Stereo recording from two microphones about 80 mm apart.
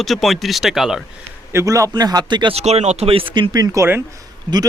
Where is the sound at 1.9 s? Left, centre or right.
Right.